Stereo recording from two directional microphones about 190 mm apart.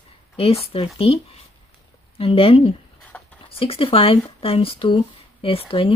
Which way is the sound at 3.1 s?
10° left (ahead or behind).